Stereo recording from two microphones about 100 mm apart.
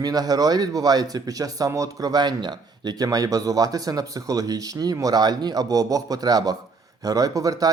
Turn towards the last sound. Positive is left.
turn(degrees=-35)  # may be behind; listen again after turning